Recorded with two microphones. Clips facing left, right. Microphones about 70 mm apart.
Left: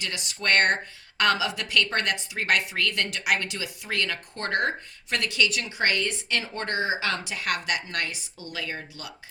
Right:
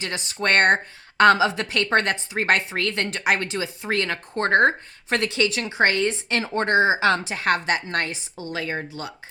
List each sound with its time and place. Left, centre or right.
0.0 s a woman's voice: right